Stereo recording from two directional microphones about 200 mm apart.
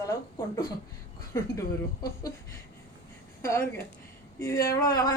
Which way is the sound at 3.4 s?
15° left (ahead or behind).